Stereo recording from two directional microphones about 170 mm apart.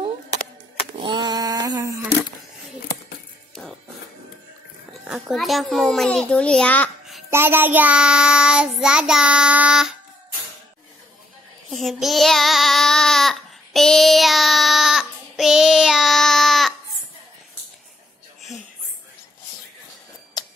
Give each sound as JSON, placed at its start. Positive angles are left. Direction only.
{"t": 0.9, "sound": "a sound", "side_deg": -30}
{"t": 5.0, "sound": "a child's voice", "side_deg": -5}
{"t": 7.2, "sound": "child singing", "side_deg": -15}
{"t": 11.7, "sound": "child singing", "side_deg": 0}